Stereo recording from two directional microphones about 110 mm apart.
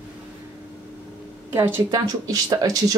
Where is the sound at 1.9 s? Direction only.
35° right (ahead or behind).